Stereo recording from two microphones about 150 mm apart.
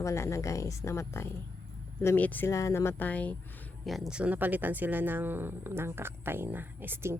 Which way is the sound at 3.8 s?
Centre (ahead or behind).